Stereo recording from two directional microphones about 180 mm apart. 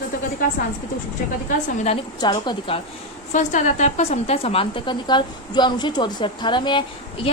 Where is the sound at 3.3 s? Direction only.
45° left (ahead or behind).